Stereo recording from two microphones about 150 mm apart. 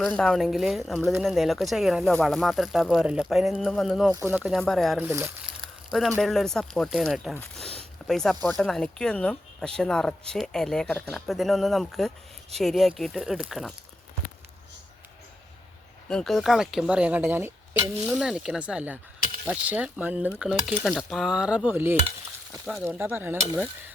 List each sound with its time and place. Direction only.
0.0 s speech: 5° left (ahead or behind)
4.1 s speech: 15° right (ahead or behind); by 4.9 s centre (ahead or behind)
4.9 s speech: 15° right (ahead or behind)
6.2 s speech: centre (ahead or behind)
7.3 s zipper: 5° left (ahead or behind)
8.4 s speech: centre (ahead or behind)
16.0 s speech: 5° left (ahead or behind); by 17.5 s 15° right (ahead or behind)
18.0 s speech: 5° right (ahead or behind)